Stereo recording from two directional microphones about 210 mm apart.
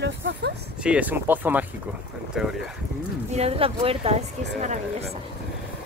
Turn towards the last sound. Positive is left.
turn(degrees=-35)  # may be behind; listen again after turning